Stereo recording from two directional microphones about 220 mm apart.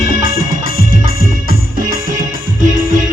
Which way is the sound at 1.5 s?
40° right (ahead or behind).